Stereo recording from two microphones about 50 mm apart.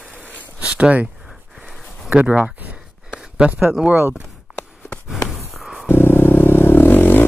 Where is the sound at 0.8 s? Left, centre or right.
Right.